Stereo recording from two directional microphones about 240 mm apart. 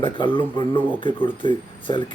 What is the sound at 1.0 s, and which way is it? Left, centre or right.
A man's voice, centre.